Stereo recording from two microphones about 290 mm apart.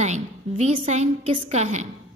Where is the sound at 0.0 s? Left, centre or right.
Right.